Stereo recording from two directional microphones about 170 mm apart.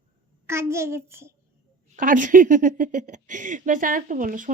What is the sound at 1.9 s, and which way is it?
Speech, 50° right (ahead or behind).